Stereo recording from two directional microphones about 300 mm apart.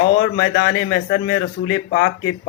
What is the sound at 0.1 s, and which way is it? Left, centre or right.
A man's voice, left.